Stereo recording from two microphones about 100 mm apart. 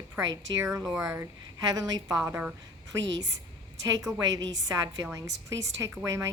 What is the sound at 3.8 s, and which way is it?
A woman's voice, 35° right (ahead or behind).